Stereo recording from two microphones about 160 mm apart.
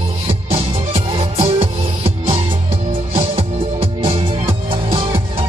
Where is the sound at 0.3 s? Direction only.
35° right (ahead or behind).